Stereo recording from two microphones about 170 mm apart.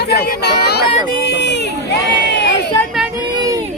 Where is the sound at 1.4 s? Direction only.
90° left.